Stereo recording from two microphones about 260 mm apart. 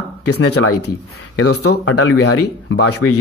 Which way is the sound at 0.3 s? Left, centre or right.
Left.